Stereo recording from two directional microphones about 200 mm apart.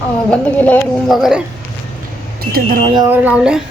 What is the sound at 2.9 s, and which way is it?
Speech, 20° right (ahead or behind).